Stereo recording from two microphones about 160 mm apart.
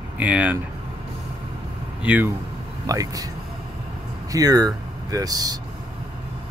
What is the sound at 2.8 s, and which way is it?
Speech, 20° right (ahead or behind).